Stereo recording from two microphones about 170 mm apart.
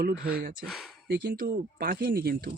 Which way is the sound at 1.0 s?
65° right (ahead or behind).